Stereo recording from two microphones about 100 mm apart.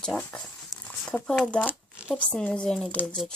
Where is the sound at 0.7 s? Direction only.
35° left (ahead or behind).